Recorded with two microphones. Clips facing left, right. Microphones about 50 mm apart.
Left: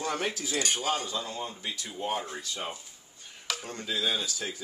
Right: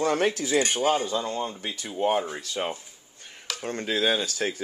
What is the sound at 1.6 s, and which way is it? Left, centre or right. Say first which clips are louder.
Speech: right 8 dB; right.